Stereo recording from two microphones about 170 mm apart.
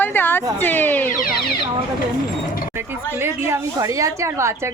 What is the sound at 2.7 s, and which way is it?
Music, 15° right (ahead or behind).